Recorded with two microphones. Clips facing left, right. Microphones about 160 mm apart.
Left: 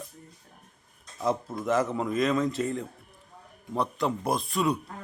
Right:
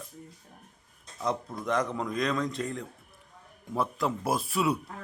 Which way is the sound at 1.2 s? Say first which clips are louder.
Left 3 dB; 5° left (ahead or behind).